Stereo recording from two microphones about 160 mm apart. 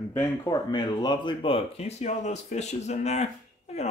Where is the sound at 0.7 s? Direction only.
25° left (ahead or behind); by 3.9 s 45° left (ahead or behind).